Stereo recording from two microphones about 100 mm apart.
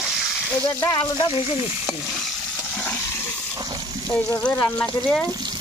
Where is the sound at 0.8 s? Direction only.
50° left (ahead or behind).